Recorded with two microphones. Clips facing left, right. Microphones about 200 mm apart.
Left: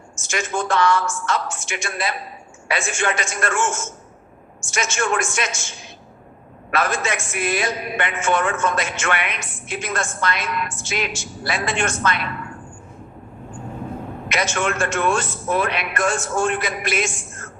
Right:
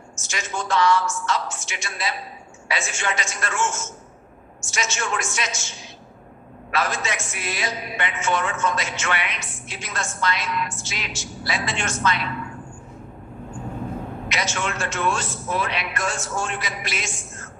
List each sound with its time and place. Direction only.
0.2 s a man's voice: 50° left (ahead or behind)
14.3 s a man's voice: 55° left (ahead or behind)